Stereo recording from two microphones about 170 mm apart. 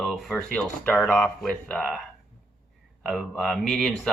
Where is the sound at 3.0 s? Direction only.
Centre (ahead or behind).